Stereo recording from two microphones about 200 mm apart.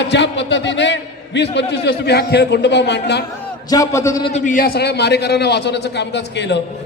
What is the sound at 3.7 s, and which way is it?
Speech, 15° left (ahead or behind).